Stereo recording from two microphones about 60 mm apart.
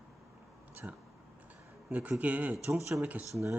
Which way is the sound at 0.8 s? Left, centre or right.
Right.